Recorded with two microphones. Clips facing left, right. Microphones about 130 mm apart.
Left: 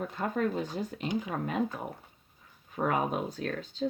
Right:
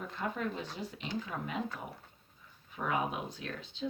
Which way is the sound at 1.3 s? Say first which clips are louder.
Left 5 dB; 45° left (ahead or behind).